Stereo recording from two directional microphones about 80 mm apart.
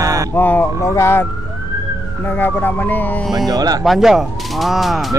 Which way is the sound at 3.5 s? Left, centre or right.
Right.